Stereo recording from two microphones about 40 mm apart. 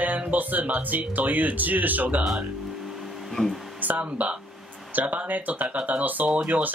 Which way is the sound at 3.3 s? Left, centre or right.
Centre.